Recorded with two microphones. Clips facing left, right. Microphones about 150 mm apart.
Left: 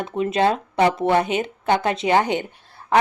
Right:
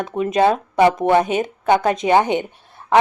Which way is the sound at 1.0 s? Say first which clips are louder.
Right 3 dB; 15° right (ahead or behind).